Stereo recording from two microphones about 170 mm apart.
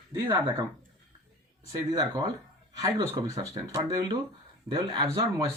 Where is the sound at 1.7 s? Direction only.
25° right (ahead or behind).